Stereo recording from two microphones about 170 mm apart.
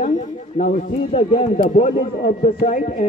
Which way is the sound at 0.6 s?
45° left (ahead or behind).